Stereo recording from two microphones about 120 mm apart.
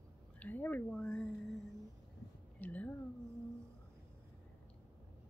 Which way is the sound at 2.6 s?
15° left (ahead or behind).